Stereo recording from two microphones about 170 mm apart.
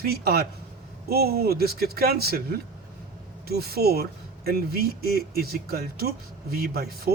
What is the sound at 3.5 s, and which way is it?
Speech, 65° right (ahead or behind).